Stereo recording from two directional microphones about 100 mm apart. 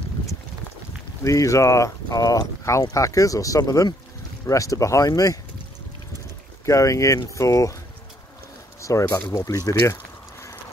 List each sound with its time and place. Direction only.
1.2 s speech: 30° left (ahead or behind)
6.6 s speech: 30° left (ahead or behind)
9.0 s speech: 30° left (ahead or behind)